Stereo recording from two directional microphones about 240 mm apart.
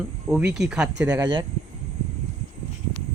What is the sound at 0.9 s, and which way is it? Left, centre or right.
Speech, centre.